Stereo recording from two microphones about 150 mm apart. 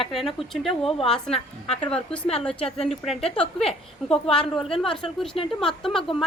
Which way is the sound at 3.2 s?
40° left (ahead or behind).